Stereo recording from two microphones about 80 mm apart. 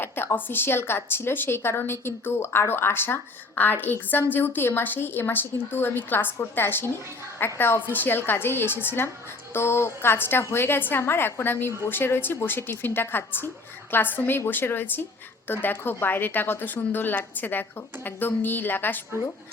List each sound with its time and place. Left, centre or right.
0.0 s a woman's voice: left